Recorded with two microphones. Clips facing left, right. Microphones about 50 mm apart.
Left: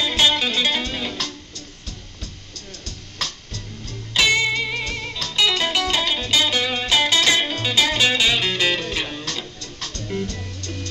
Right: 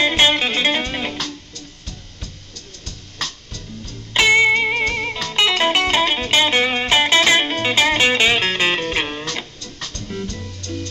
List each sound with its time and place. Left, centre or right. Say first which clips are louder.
0.0 s music: right 3 dB; right
4.1 s music: right 5 dB; right